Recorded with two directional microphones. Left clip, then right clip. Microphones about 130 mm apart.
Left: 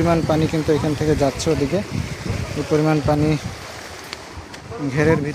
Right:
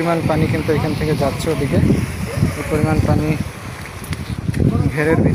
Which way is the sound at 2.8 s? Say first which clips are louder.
Left 1 dB; 60° left (ahead or behind).